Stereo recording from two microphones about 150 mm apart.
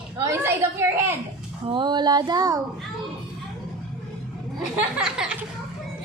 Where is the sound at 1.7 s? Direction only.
30° right (ahead or behind).